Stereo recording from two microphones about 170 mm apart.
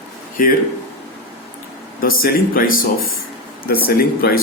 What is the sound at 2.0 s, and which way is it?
Speech, 60° left (ahead or behind).